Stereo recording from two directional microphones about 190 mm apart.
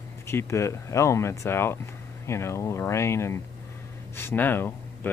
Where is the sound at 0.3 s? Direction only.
15° left (ahead or behind).